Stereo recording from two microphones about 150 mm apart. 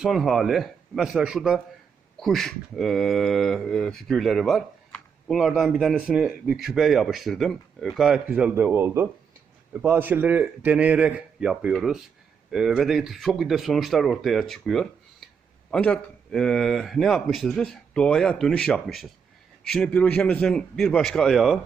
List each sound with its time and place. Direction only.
0.0 s speech: centre (ahead or behind)